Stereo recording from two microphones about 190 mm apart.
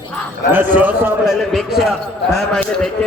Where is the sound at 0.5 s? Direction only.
10° right (ahead or behind).